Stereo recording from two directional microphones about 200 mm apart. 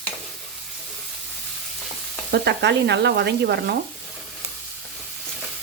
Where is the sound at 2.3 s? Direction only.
60° right (ahead or behind).